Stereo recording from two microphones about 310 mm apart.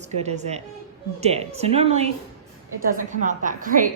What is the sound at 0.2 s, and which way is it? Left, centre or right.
A woman's voice, right.